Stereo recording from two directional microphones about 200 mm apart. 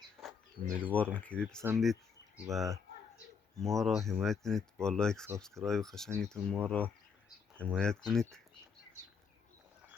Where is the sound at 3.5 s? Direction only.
Centre (ahead or behind).